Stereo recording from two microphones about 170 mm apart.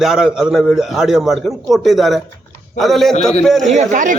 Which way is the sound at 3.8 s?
50° right (ahead or behind).